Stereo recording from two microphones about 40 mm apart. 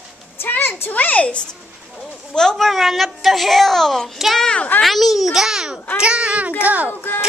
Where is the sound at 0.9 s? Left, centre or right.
Left.